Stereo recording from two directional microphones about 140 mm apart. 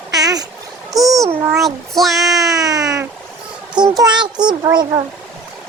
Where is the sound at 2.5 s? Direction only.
25° right (ahead or behind).